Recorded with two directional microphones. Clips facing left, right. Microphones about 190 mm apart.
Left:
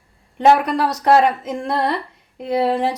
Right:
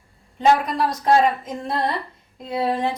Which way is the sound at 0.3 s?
70° left (ahead or behind).